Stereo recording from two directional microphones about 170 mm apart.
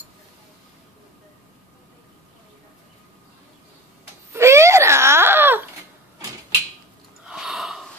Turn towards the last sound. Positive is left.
turn(degrees=-5)  # may be behind; listen again after turning